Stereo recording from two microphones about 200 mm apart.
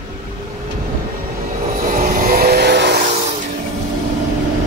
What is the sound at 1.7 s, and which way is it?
Vehicle, 45° right (ahead or behind).